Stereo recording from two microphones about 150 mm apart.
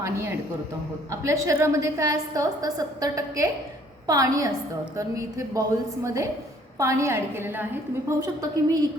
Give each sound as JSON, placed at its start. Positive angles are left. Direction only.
{"t": 1.1, "sound": "a woman's voice", "side_deg": -20}